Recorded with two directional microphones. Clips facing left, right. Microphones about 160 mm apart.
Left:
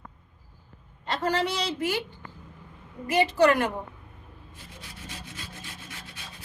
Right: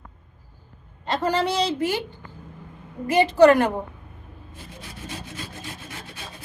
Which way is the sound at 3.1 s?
30° right (ahead or behind).